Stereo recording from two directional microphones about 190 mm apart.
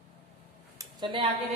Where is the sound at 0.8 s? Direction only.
25° right (ahead or behind).